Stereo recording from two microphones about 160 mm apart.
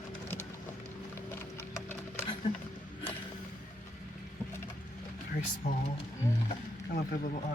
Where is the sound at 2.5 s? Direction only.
40° left (ahead or behind).